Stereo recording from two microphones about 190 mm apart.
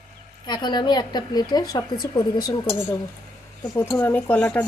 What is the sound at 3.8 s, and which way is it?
Speech, 10° left (ahead or behind).